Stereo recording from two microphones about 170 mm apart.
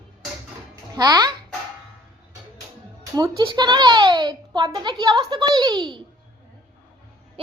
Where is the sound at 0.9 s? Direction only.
25° right (ahead or behind).